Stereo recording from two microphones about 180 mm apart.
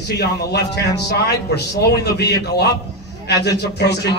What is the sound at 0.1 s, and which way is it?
A man's voice, 65° left (ahead or behind).